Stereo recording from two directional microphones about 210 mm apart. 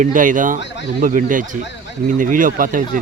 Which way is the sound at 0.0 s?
40° right (ahead or behind).